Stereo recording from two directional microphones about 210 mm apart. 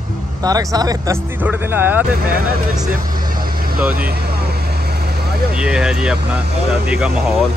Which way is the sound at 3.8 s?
5° right (ahead or behind).